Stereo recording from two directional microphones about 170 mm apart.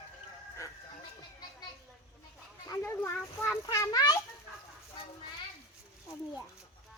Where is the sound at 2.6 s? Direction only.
15° left (ahead or behind).